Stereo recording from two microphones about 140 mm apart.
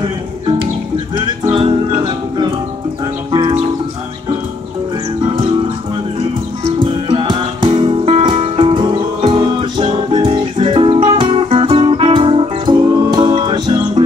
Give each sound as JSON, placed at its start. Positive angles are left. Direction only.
{"t": 1.5, "sound": "music", "side_deg": -40}
{"t": 6.8, "sound": "music", "side_deg": -35}